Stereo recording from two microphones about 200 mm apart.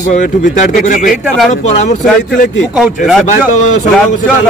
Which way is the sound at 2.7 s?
5° right (ahead or behind).